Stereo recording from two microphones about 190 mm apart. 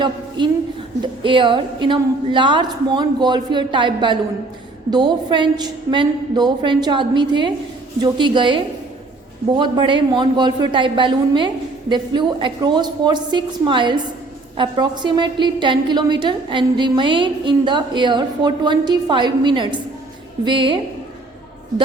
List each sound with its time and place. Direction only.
0.4 s a woman's voice: 25° right (ahead or behind)